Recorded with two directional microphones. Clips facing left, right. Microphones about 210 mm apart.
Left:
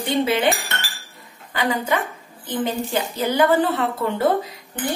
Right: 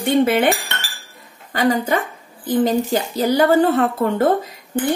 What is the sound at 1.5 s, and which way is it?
A woman's voice, 40° right (ahead or behind).